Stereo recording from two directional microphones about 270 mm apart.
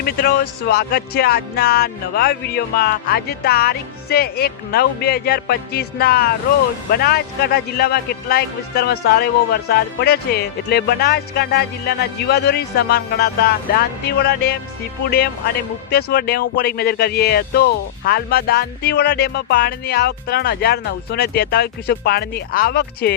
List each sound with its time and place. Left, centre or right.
0.0 s speech: left